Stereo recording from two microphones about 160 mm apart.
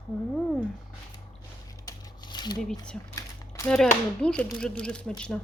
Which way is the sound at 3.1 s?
20° left (ahead or behind).